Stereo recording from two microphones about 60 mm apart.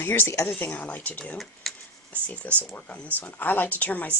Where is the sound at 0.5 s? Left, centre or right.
Left.